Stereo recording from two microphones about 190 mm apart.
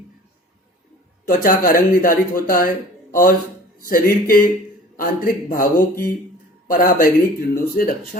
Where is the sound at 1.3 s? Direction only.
45° left (ahead or behind).